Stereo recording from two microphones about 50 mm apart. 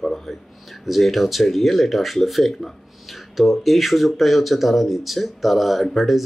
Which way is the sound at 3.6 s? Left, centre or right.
Centre.